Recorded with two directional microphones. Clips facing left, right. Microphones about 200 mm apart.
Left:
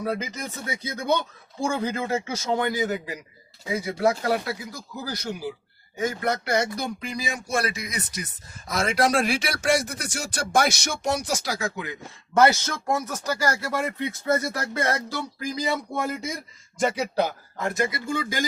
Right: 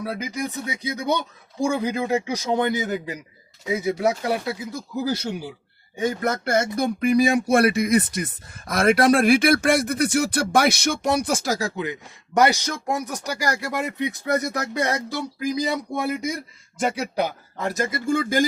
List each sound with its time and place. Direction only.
0.0 s speech: 10° right (ahead or behind); by 5.3 s 25° right (ahead or behind)
6.2 s speech: 50° right (ahead or behind)
11.8 s speech: 15° right (ahead or behind)
16.7 s speech: centre (ahead or behind)
17.6 s speech: 40° right (ahead or behind)